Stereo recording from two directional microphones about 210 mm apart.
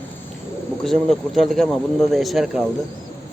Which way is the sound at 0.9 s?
Centre (ahead or behind).